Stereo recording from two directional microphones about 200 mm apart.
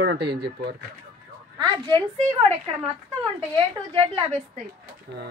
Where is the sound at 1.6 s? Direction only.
25° right (ahead or behind).